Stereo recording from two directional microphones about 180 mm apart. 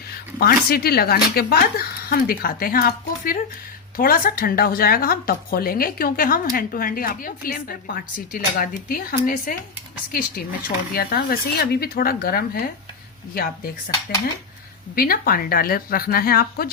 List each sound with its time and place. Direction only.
0.3 s speech: 55° left (ahead or behind)
14.9 s speech: 55° left (ahead or behind)